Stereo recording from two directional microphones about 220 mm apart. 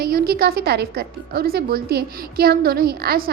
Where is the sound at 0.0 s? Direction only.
45° right (ahead or behind).